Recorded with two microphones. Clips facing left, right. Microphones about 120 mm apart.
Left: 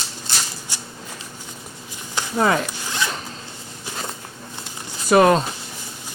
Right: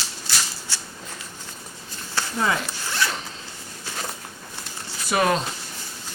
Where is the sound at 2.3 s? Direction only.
45° left (ahead or behind).